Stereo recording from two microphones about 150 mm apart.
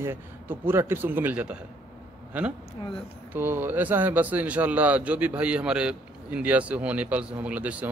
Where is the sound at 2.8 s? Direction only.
30° left (ahead or behind).